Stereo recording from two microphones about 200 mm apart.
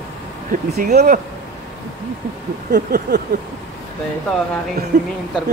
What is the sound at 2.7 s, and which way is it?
Speech, 50° right (ahead or behind).